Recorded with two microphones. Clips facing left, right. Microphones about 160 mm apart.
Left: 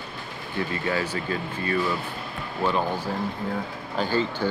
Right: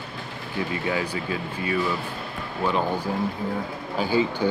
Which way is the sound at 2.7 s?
15° right (ahead or behind).